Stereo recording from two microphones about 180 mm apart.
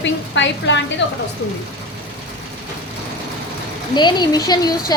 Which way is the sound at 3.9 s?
25° left (ahead or behind).